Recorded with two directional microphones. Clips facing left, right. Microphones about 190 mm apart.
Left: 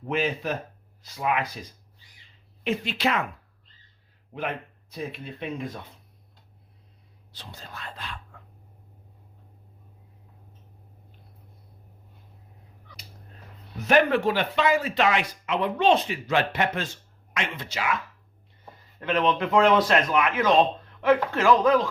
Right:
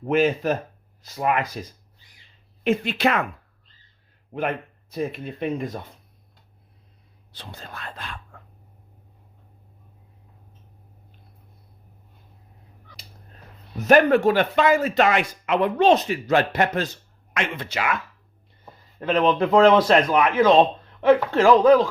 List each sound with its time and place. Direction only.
0.0 s speech: 50° right (ahead or behind)
2.6 s speech: 55° right (ahead or behind)
4.4 s speech: 50° right (ahead or behind)
7.3 s speech: 60° right (ahead or behind)
13.8 s speech: 45° right (ahead or behind)
17.3 s speech: 55° right (ahead or behind)
18.9 s speech: 35° right (ahead or behind)